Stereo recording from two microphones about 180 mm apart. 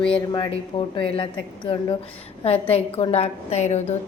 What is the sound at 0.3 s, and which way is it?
A woman's voice, 25° left (ahead or behind).